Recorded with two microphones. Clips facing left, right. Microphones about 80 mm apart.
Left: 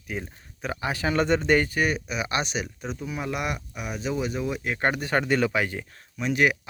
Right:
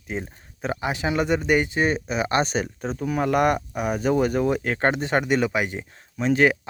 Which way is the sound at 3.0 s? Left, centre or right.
Right.